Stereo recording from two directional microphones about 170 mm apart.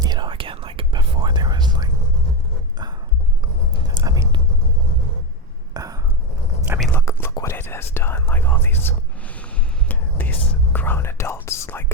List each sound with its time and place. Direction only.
0.0 s whispering: 25° right (ahead or behind)
3.8 s whispering: 20° right (ahead or behind)
5.7 s a sound: 20° right (ahead or behind)
6.9 s whispering: 15° left (ahead or behind)